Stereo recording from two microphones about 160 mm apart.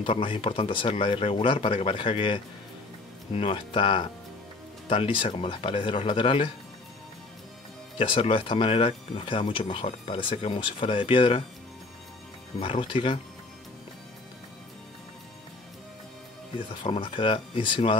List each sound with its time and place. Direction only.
0.0 s speech: 35° left (ahead or behind)
8.0 s speech: 35° left (ahead or behind)
12.5 s speech: 35° left (ahead or behind)
16.8 s speech: 35° left (ahead or behind)